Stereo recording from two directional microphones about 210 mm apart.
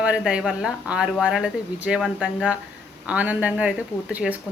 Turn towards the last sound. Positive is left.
turn(degrees=-5)  # may be behind; listen again after turning